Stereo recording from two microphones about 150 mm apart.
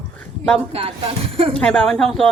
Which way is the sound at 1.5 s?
5° left (ahead or behind).